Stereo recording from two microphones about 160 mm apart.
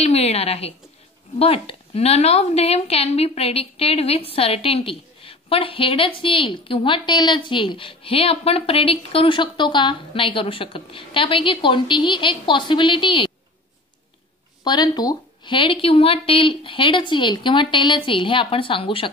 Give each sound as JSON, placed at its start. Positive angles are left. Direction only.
{"t": 0.0, "sound": "speech", "side_deg": 40}
{"t": 14.6, "sound": "speech", "side_deg": 25}